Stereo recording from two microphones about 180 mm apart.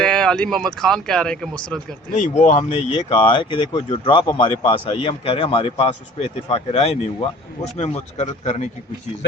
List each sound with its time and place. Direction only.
0.0 s speech: 5° left (ahead or behind)
2.1 s speech: 40° left (ahead or behind)
2.6 s speech: 30° left (ahead or behind)